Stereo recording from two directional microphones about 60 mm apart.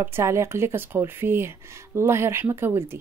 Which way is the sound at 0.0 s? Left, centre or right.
Right.